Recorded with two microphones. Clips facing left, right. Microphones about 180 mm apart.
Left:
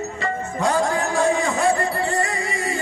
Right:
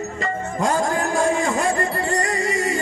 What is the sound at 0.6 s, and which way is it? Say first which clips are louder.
Music: left 1 dB; 45° right (ahead or behind).